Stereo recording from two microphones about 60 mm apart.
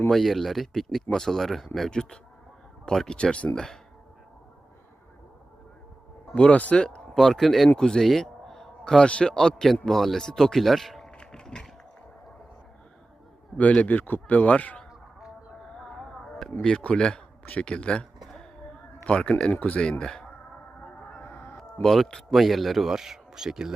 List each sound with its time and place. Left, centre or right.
0.1 s a man's voice: centre
6.3 s speech: left
7.2 s a man's voice: centre
11.2 s a sound: centre
13.6 s a man's voice: left
15.8 s chop: centre
16.6 s speech: centre
19.0 s speech: centre
21.2 s a sound: left
21.6 s speech: centre